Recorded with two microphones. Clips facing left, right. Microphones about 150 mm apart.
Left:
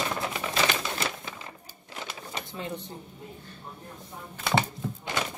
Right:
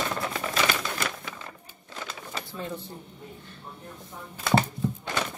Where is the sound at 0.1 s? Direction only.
15° left (ahead or behind).